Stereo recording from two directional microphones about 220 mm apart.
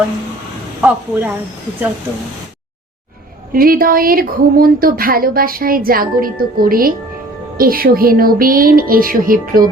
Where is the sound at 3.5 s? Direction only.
40° right (ahead or behind).